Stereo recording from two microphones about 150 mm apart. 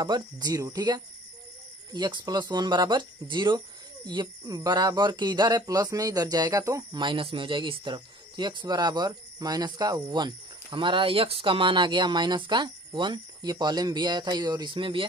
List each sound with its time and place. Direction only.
0.0 s speech: 25° right (ahead or behind)